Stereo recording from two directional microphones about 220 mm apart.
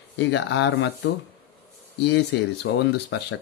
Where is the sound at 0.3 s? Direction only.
55° left (ahead or behind).